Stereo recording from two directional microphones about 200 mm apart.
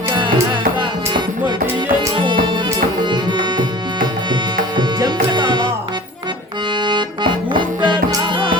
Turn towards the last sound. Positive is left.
turn(degrees=-25)  # may be behind; listen again after turning